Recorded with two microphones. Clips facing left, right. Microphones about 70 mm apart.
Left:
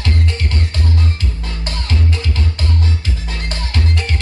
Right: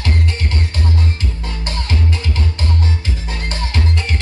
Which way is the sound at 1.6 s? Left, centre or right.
Right.